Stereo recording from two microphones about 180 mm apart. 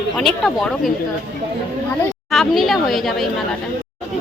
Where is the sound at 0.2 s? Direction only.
Centre (ahead or behind).